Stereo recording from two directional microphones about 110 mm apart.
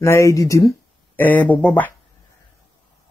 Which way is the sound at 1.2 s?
15° left (ahead or behind).